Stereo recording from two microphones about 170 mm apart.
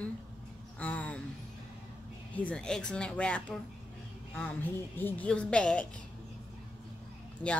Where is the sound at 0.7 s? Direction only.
10° left (ahead or behind).